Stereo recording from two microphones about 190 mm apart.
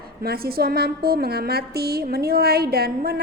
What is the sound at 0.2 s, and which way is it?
A woman's voice, 50° right (ahead or behind).